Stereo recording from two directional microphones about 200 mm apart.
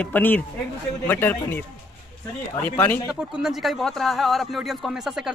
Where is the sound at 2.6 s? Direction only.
10° left (ahead or behind).